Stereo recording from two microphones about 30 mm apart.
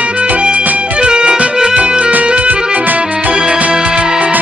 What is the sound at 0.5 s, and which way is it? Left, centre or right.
Music, right.